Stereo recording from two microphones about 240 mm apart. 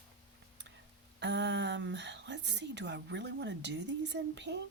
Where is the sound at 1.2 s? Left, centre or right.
Right.